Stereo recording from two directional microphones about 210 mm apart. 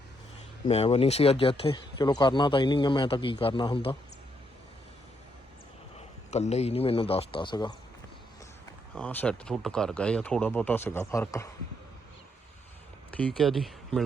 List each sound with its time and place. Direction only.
0.7 s speech: 30° left (ahead or behind)
6.3 s speech: 30° left (ahead or behind)
9.0 s speech: 5° left (ahead or behind)
13.1 s speech: 5° left (ahead or behind)